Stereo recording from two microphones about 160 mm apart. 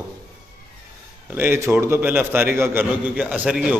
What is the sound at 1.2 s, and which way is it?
A man's voice, 15° right (ahead or behind).